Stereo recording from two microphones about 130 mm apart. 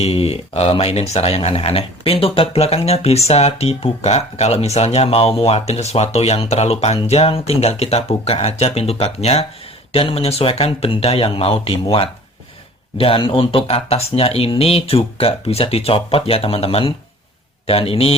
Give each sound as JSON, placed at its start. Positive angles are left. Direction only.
{"t": 0.0, "sound": "speech", "side_deg": 50}